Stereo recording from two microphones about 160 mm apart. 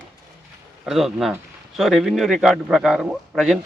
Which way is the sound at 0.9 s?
Centre (ahead or behind).